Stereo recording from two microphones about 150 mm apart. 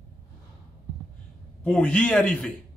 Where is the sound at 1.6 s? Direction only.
5° left (ahead or behind).